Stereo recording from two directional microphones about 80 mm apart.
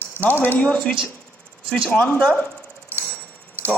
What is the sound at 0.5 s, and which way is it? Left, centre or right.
Speech, centre.